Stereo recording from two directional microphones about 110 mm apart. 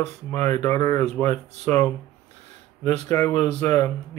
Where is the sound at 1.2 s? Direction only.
90° right.